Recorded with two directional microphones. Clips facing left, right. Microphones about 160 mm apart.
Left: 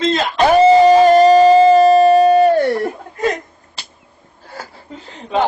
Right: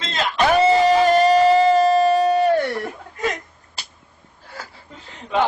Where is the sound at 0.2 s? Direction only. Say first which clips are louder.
Left 3 dB; 35° left (ahead or behind).